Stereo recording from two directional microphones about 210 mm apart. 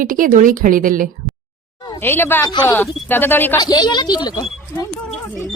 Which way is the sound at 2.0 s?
10° left (ahead or behind).